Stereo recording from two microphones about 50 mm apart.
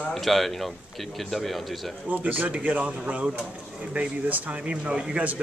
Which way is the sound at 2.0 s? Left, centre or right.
Right.